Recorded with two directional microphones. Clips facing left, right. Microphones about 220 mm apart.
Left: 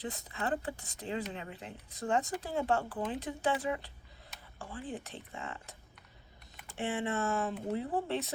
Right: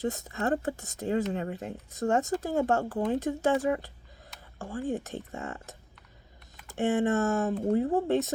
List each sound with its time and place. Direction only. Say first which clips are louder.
0.0 s speech: right 8 dB; 45° right (ahead or behind)